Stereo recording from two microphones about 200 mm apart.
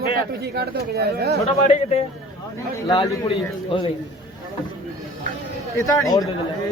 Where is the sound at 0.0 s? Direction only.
55° right (ahead or behind).